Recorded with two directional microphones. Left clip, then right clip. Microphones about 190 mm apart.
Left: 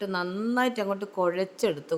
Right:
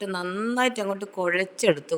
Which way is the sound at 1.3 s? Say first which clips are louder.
Right 7 dB; 35° right (ahead or behind).